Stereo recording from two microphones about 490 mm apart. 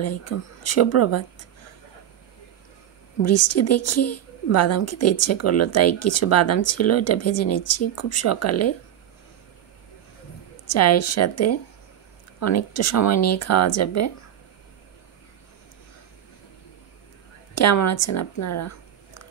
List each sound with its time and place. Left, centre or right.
0.0 s a woman's voice: left
3.2 s a woman's voice: left
10.7 s a woman's voice: left
17.6 s speech: left